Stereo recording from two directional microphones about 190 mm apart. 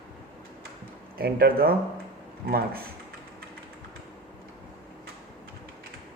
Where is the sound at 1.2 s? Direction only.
55° right (ahead or behind).